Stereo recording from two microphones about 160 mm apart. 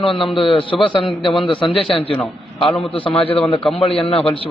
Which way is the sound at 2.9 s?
35° left (ahead or behind).